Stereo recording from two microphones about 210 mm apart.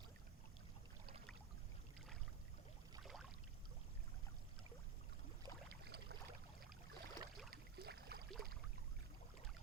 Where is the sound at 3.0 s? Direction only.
Centre (ahead or behind).